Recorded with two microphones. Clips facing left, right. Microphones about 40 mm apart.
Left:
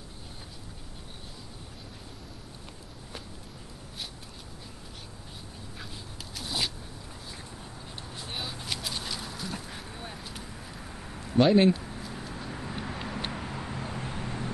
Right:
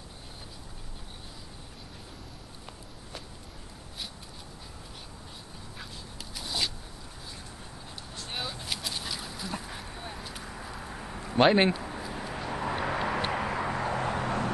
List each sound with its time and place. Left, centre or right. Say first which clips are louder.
6.3 s a sound: even; centre
8.3 s dog: right 1 dB; centre
11.3 s speech: left 1 dB; right
12.1 s vehicle: right 3 dB; right
12.4 s vehicle: right 9 dB; right